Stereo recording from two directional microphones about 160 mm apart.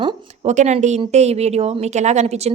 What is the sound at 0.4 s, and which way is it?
Speech, 45° right (ahead or behind).